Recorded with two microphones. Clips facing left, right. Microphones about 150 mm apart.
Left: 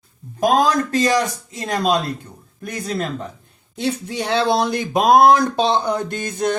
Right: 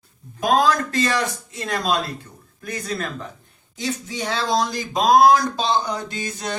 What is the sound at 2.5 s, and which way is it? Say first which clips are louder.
Speech: left 2 dB; 30° left (ahead or behind).